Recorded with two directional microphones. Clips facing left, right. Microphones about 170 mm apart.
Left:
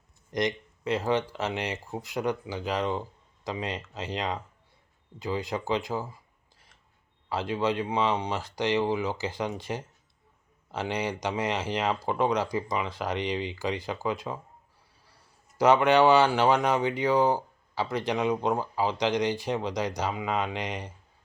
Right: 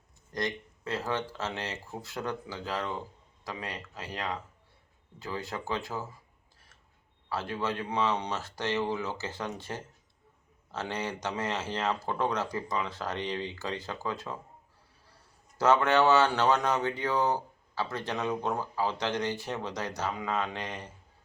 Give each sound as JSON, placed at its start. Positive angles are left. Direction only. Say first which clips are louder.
{"t": 0.3, "sound": "speech", "louder": "left 5 dB", "side_deg": 20}
{"t": 7.3, "sound": "speech", "louder": "left 5 dB", "side_deg": 15}
{"t": 15.5, "sound": "speech", "louder": "left 4 dB", "side_deg": 15}